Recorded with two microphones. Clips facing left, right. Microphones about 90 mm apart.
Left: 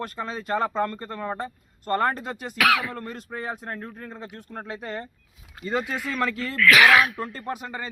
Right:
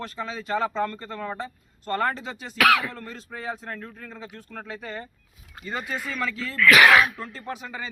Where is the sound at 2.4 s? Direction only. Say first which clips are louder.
Right 2 dB; 10° left (ahead or behind).